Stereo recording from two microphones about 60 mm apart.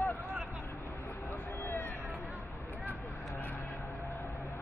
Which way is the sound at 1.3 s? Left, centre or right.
Left.